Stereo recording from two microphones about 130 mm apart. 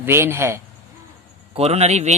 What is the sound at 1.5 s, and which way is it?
Speech, 50° right (ahead or behind).